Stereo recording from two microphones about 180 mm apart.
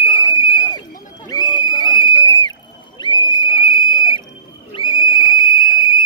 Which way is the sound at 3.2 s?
25° left (ahead or behind).